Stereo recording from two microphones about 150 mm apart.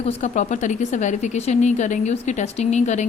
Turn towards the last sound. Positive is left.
turn(degrees=50)  # may be behind; listen again after turning